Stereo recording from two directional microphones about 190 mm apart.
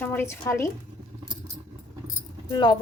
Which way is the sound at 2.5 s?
25° left (ahead or behind).